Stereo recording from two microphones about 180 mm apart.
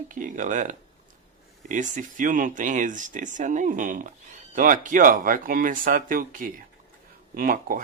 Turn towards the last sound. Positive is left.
turn(degrees=-50)  # may be behind; listen again after turning